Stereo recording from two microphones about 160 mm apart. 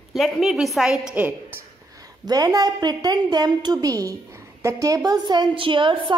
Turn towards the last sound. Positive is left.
turn(degrees=-30)  # may be behind; listen again after turning